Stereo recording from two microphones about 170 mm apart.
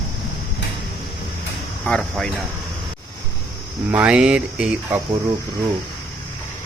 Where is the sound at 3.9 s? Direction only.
10° right (ahead or behind).